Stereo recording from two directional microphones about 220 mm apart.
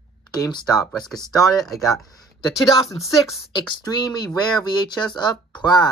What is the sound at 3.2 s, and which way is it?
Speech, 20° left (ahead or behind).